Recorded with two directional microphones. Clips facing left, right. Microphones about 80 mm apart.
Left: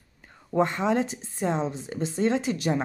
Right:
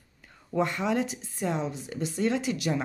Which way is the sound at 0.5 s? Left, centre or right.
Left.